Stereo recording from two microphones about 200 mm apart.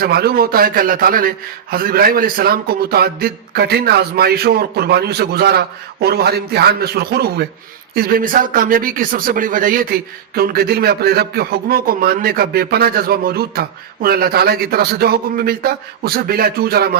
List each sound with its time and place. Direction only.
0.0 s speech: 50° right (ahead or behind)